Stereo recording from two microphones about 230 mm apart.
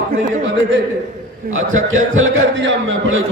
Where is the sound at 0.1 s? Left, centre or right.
Right.